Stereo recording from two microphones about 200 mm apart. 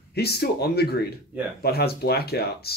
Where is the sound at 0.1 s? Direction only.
50° left (ahead or behind).